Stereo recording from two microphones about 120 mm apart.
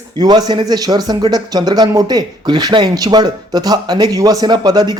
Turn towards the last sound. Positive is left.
turn(degrees=-35)  # may be behind; listen again after turning